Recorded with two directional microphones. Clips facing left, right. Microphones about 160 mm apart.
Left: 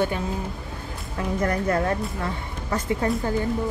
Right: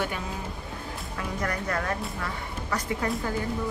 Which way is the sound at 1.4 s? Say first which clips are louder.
Left 7 dB; 25° left (ahead or behind).